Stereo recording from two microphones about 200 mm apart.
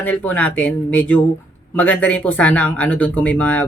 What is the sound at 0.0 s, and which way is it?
Speech, 10° left (ahead or behind).